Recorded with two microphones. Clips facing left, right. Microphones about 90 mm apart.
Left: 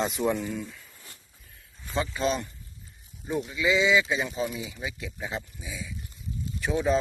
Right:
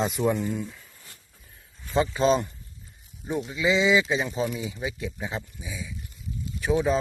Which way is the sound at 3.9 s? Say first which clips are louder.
Right 2 dB; 5° right (ahead or behind).